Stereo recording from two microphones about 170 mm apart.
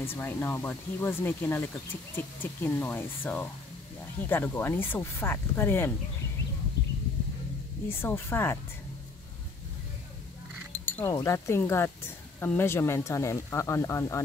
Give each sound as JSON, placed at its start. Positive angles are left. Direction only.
{"t": 0.0, "sound": "speech", "side_deg": 10}
{"t": 7.9, "sound": "speech", "side_deg": 15}
{"t": 10.7, "sound": "speech", "side_deg": 10}